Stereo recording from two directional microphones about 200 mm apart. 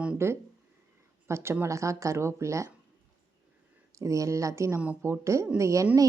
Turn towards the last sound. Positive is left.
turn(degrees=-15)  # may be behind; listen again after turning